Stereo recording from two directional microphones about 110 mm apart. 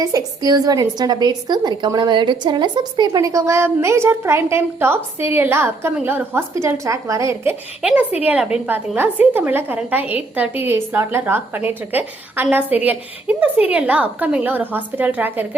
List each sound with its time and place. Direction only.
0.0 s a woman's voice: 35° right (ahead or behind)
7.8 s a woman's voice: 10° right (ahead or behind)